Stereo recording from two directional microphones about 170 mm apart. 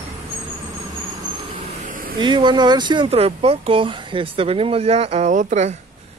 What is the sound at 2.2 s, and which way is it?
Speech, 25° right (ahead or behind).